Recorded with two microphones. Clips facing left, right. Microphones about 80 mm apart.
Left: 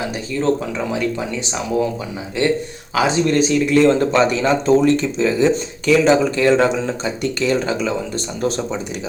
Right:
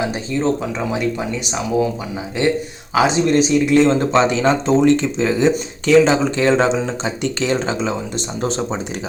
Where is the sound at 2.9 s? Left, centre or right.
Right.